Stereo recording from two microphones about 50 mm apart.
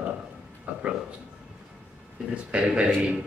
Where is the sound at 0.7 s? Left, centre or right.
Right.